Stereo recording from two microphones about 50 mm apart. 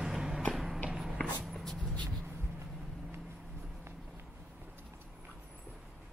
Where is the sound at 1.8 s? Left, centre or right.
Left.